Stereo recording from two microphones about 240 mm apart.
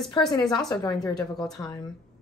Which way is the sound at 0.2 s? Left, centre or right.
Centre.